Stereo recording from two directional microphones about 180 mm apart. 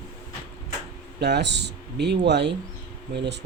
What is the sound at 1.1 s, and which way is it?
Speech, 65° right (ahead or behind).